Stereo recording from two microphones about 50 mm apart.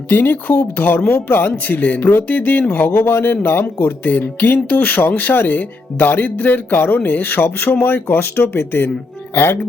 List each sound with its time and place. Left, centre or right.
0.1 s speech: left
4.0 s speech: left